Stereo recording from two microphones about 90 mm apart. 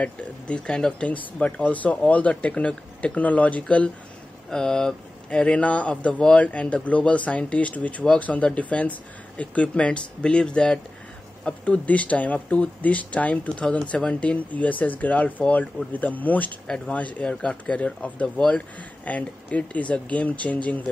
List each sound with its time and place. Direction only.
0.0 s speech: 15° left (ahead or behind)